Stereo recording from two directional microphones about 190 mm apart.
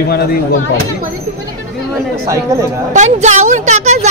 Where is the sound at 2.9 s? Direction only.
40° right (ahead or behind).